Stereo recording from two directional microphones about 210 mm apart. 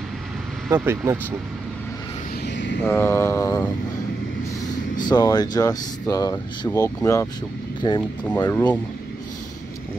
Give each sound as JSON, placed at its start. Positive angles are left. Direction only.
{"t": 0.7, "sound": "speech", "side_deg": -10}
{"t": 2.4, "sound": "a sound", "side_deg": 55}
{"t": 2.8, "sound": "speech", "side_deg": 10}
{"t": 5.0, "sound": "speech", "side_deg": 20}